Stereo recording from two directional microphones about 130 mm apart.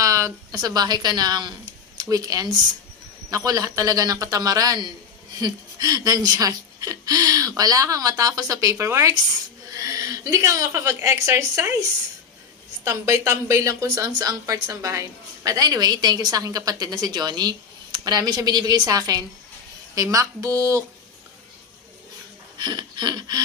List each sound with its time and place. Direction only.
0.0 s a woman's voice: 25° right (ahead or behind)
12.8 s a woman's voice: 20° right (ahead or behind)
22.6 s a sound: 35° right (ahead or behind)